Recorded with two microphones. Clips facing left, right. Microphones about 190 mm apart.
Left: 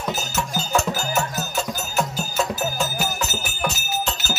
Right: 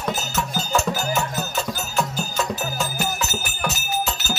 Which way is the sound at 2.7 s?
Centre (ahead or behind).